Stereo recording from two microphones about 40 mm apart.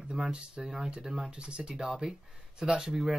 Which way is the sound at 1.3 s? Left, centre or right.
Right.